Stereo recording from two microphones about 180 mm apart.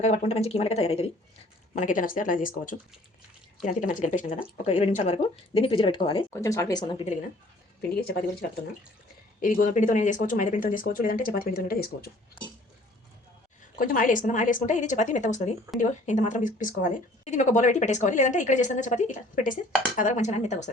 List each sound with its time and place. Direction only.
0.0 s speech: 40° left (ahead or behind)
6.3 s speech: 15° left (ahead or behind)
7.8 s a woman's voice: 60° left (ahead or behind)
9.6 s speech: 45° left (ahead or behind)
13.7 s speech: 50° left (ahead or behind)